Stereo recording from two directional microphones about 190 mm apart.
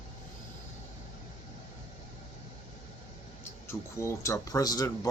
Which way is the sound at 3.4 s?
15° left (ahead or behind).